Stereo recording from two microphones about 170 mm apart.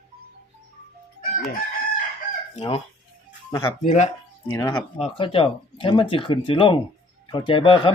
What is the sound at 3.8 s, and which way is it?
Speech, 40° left (ahead or behind).